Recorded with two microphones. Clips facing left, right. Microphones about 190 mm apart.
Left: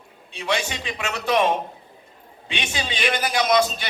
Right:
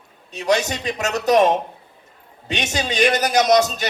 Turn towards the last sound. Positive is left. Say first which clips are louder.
# right 4 dB
turn(degrees=-45)  # may be behind; listen again after turning